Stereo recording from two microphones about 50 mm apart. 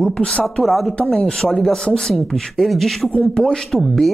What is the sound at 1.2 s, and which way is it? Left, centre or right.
Speech, centre.